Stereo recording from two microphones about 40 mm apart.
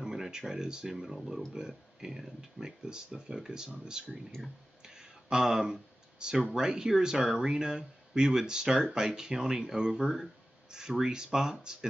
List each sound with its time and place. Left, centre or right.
0.0 s speech: centre
4.8 s a sound: centre
6.5 s speech: centre
9.9 s speech: centre